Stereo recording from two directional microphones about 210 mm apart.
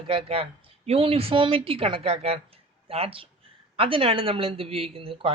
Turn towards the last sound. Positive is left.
turn(degrees=-25)  # may be behind; listen again after turning